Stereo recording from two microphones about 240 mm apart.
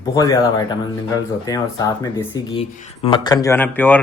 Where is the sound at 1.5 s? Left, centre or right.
Centre.